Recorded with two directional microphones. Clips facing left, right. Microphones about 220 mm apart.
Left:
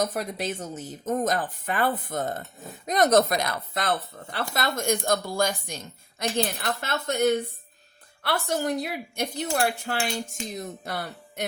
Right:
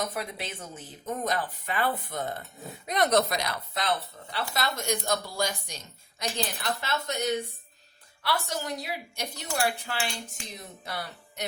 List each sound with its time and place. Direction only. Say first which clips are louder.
0.0 s a woman's voice: left 6 dB; 45° left (ahead or behind)